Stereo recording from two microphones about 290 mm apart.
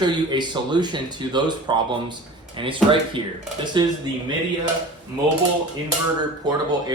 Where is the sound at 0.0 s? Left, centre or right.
Centre.